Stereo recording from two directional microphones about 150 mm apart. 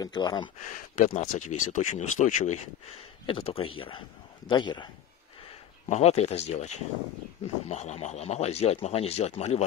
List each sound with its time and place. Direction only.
0.0 s speech: 30° left (ahead or behind)
0.6 s speech: 55° left (ahead or behind)
1.1 s a man's voice: 50° left (ahead or behind); by 4.8 s 30° left (ahead or behind)
5.9 s speech: 45° left (ahead or behind)